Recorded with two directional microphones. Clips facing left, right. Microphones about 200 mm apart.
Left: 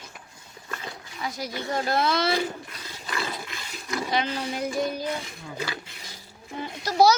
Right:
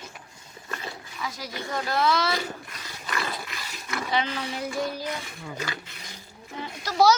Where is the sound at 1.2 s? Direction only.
25° left (ahead or behind).